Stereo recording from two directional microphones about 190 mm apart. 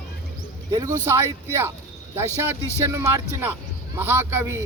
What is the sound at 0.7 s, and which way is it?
Speech, 15° right (ahead or behind).